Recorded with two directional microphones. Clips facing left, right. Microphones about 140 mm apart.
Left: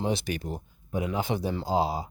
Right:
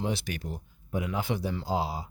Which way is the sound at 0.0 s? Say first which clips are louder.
Left 3 dB; 20° left (ahead or behind).